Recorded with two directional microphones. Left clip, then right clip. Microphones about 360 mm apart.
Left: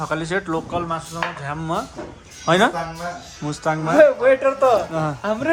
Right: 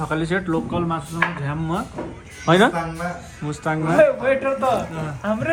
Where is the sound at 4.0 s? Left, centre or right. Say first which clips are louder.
Left 4 dB; left.